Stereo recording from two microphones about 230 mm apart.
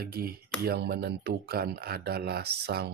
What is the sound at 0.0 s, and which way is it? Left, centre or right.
Speech, right.